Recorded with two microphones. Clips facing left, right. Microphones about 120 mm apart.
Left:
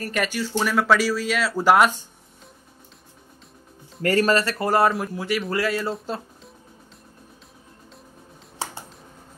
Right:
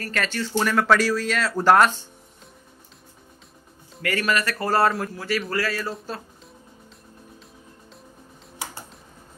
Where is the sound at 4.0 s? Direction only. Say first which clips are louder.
Left 5 dB; 35° left (ahead or behind).